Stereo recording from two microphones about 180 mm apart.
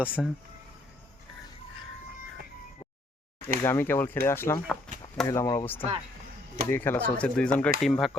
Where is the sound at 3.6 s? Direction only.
15° left (ahead or behind).